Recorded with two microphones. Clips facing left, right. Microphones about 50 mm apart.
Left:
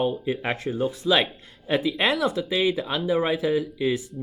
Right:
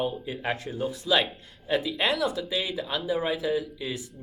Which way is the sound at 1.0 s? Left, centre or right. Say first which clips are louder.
Left 2 dB; left.